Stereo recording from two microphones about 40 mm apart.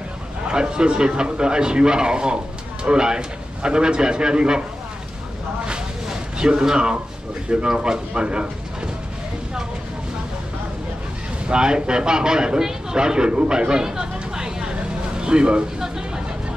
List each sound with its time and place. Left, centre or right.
0.5 s a man's voice: right
5.7 s a sound: centre
7.4 s speech: right
11.4 s speech: right